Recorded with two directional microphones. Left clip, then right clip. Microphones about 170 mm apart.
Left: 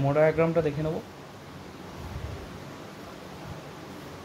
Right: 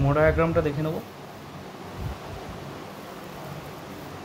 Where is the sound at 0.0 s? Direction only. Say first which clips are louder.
Right 1 dB; 15° left (ahead or behind).